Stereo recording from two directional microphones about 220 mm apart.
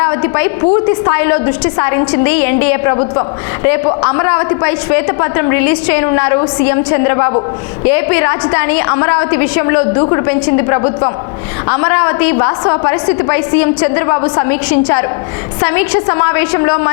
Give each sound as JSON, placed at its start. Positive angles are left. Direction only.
{"t": 0.0, "sound": "a woman's voice", "side_deg": 10}
{"t": 11.7, "sound": "a woman's voice", "side_deg": 10}